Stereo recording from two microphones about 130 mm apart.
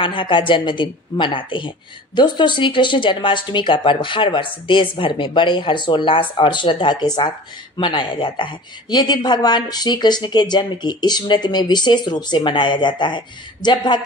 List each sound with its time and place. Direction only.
0.0 s speech: 40° left (ahead or behind)